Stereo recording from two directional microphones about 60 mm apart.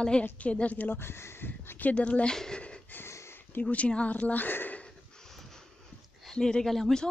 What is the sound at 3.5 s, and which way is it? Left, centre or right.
Speech, left.